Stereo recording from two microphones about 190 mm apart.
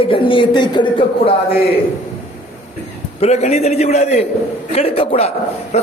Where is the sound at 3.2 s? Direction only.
35° left (ahead or behind).